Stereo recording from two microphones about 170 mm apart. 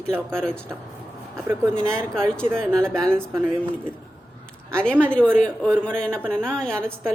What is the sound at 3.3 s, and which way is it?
Speech, 15° right (ahead or behind).